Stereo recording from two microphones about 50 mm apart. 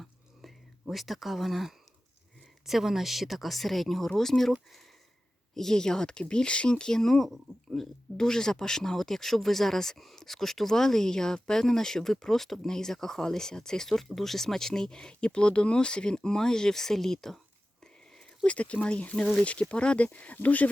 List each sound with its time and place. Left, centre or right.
0.0 s whispering: centre
2.6 s speech: centre
5.5 s speech: centre
18.4 s speech: left